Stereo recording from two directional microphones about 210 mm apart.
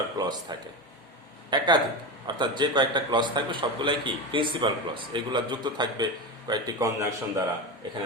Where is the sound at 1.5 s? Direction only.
20° right (ahead or behind).